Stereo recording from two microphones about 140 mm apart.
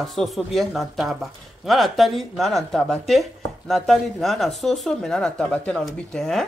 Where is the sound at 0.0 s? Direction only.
Centre (ahead or behind).